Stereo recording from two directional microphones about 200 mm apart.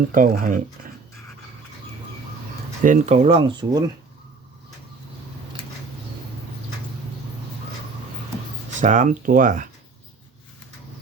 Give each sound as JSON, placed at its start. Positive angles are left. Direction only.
{"t": 0.1, "sound": "speech", "side_deg": -45}
{"t": 2.8, "sound": "speech", "side_deg": -35}
{"t": 8.8, "sound": "speech", "side_deg": -40}